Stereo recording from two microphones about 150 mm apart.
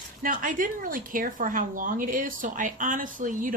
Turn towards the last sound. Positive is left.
turn(degrees=-60)  # may be behind; listen again after turning